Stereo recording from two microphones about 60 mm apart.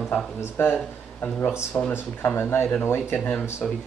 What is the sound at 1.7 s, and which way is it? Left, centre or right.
Speech, left.